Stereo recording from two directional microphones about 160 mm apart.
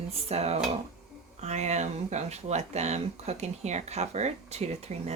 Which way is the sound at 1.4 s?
45° right (ahead or behind).